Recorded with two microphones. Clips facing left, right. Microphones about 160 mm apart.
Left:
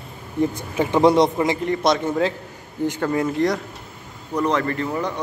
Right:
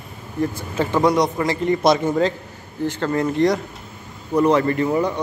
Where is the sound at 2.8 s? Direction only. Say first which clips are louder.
Right 1 dB; 10° left (ahead or behind).